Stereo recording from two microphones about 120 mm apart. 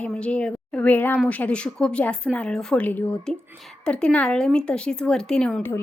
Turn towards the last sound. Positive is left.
turn(degrees=5)  # may be behind; listen again after turning